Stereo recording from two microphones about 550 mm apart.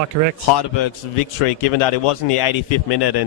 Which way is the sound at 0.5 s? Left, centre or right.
Left.